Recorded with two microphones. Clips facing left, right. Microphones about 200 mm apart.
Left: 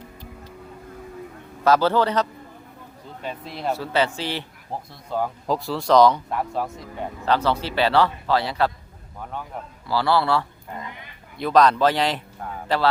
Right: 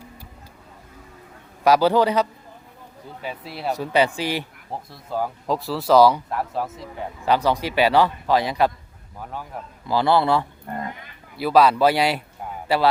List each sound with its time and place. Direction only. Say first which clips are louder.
1.6 s a man's voice: right 2 dB; 15° right (ahead or behind)
7.3 s a man's voice: right 2 dB; 15° right (ahead or behind)
9.8 s a man's voice: right 2 dB; 20° right (ahead or behind)
11.3 s a man's voice: right 1 dB; 5° right (ahead or behind)